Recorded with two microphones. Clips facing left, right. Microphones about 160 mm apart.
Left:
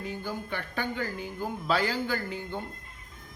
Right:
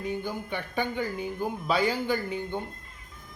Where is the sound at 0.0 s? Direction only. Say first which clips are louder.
Right 3 dB; 20° right (ahead or behind).